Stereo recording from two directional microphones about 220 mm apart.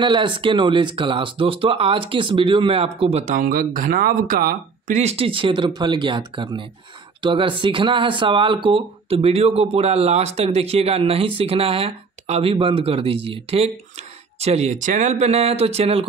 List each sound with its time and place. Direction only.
0.0 s speech: 20° right (ahead or behind)